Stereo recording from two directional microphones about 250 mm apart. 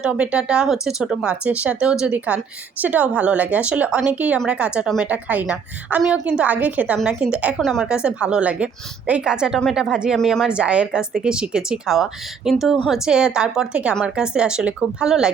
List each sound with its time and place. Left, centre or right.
0.0 s a woman's voice: centre